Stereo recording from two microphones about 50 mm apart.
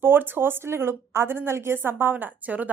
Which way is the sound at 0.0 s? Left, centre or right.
Right.